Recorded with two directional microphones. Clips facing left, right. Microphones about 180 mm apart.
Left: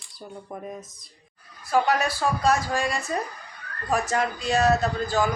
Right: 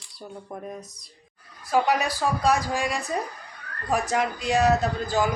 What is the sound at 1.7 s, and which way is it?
A man's voice, 15° right (ahead or behind).